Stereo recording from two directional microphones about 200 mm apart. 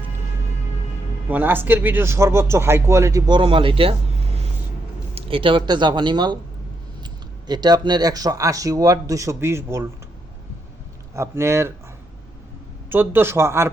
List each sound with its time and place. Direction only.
1.3 s speech: 10° right (ahead or behind); by 3.9 s 25° right (ahead or behind)
5.1 s speech: 25° right (ahead or behind)
11.1 s speech: 15° right (ahead or behind)
12.9 s speech: 10° right (ahead or behind)